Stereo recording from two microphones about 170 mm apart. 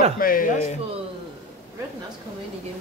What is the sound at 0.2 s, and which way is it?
Speech, 55° left (ahead or behind).